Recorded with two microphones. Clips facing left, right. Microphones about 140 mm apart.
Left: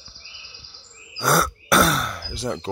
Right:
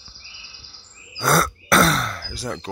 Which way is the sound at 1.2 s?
10° left (ahead or behind).